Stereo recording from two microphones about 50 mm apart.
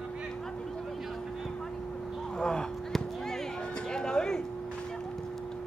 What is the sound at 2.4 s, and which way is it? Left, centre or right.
Speech, centre.